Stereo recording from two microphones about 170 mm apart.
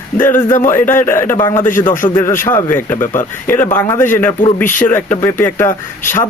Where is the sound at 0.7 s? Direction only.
10° left (ahead or behind).